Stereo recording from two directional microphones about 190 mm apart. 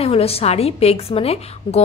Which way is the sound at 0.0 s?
30° left (ahead or behind).